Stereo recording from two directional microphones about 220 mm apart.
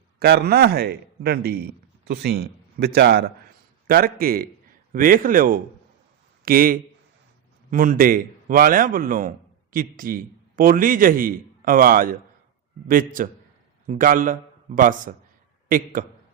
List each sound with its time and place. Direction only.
0.2 s a man's voice: 45° right (ahead or behind)